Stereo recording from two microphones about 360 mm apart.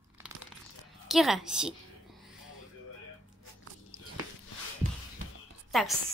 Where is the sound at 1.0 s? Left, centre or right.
Centre.